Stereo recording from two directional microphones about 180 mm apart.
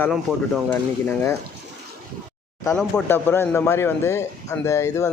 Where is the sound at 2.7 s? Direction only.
10° left (ahead or behind).